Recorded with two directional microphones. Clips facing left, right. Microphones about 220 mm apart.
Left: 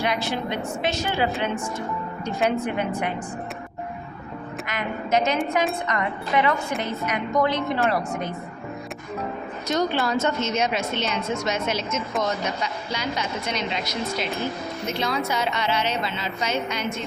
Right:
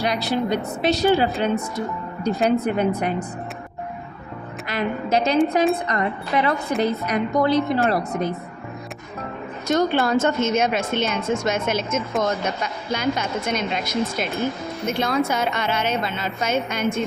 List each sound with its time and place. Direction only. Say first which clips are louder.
0.0 s a woman's voice: right 3 dB; 35° right (ahead or behind)
4.6 s a woman's voice: right 6 dB; 35° right (ahead or behind)
9.6 s a woman's voice: right 4 dB; 45° right (ahead or behind)